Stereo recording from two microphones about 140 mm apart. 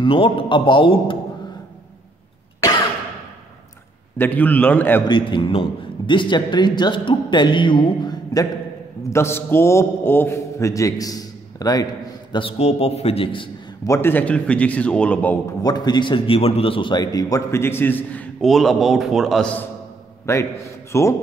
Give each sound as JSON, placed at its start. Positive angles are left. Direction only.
{"t": 0.0, "sound": "a man's voice", "side_deg": 40}
{"t": 4.2, "sound": "speech", "side_deg": 10}
{"t": 5.0, "sound": "a man's voice", "side_deg": 35}
{"t": 9.1, "sound": "a man's voice", "side_deg": 15}
{"t": 13.8, "sound": "speech", "side_deg": 20}
{"t": 15.6, "sound": "a man's voice", "side_deg": 30}
{"t": 20.3, "sound": "a man's voice", "side_deg": 20}